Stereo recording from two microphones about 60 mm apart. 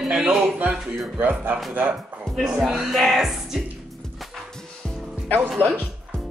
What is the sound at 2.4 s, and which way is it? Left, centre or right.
Speech, centre.